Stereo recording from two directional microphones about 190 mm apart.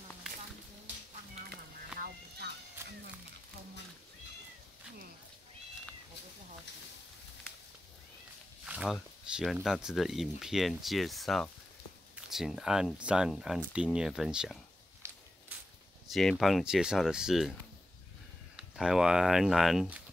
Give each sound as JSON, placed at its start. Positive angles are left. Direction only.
{"t": 2.0, "sound": "music", "side_deg": -55}
{"t": 8.6, "sound": "speech", "side_deg": -5}
{"t": 16.1, "sound": "speech", "side_deg": 0}
{"t": 18.6, "sound": "speech", "side_deg": -5}